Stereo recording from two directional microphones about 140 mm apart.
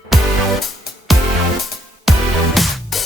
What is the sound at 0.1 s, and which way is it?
Music, centre (ahead or behind).